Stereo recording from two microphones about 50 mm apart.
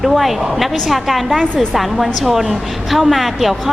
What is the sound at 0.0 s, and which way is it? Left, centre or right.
A woman's voice, centre.